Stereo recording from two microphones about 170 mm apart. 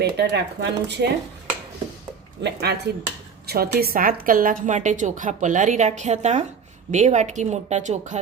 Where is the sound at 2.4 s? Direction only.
75° right (ahead or behind).